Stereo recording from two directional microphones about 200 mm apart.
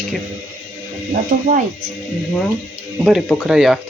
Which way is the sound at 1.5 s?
35° right (ahead or behind).